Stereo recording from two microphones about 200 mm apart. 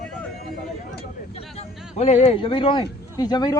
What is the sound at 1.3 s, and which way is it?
Speech, 30° left (ahead or behind).